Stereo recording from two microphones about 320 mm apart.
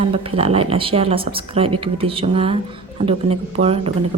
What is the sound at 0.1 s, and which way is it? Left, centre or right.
Speech, centre.